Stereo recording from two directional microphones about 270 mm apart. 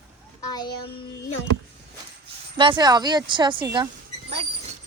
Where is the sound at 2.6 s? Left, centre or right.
Centre.